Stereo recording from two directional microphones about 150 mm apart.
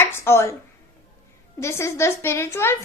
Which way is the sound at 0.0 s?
15° left (ahead or behind).